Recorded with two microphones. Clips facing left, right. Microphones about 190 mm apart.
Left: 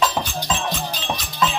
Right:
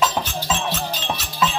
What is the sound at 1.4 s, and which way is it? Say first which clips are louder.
Music: even; 5° right (ahead or behind).